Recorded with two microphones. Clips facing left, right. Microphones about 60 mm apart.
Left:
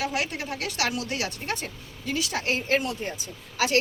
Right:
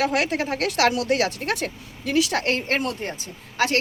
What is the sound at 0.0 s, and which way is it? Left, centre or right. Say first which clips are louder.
A woman's voice: right 7 dB; right.